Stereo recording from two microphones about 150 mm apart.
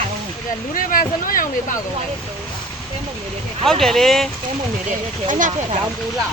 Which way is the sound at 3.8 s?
Centre (ahead or behind).